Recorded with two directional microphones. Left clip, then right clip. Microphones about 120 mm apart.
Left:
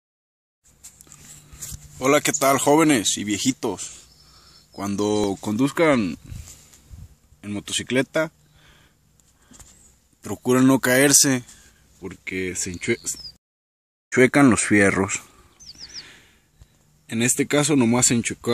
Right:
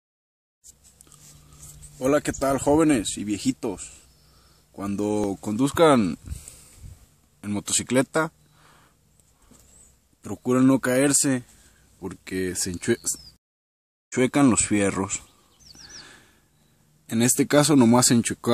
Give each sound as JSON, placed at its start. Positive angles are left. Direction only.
{"t": 2.0, "sound": "speech", "side_deg": -10}
{"t": 5.9, "sound": "speech", "side_deg": -50}
{"t": 7.3, "sound": "speech", "side_deg": -40}
{"t": 10.2, "sound": "speech", "side_deg": -5}
{"t": 12.0, "sound": "speech", "side_deg": -25}
{"t": 14.0, "sound": "speech", "side_deg": 5}
{"t": 16.0, "sound": "a sound", "side_deg": -20}
{"t": 17.0, "sound": "speech", "side_deg": -20}